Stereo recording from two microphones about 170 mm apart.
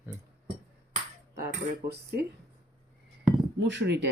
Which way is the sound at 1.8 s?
70° right (ahead or behind).